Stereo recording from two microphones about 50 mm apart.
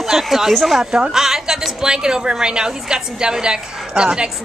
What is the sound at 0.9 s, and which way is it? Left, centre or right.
A woman's voice, centre.